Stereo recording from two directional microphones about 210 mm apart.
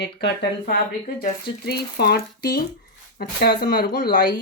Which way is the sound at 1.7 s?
50° left (ahead or behind).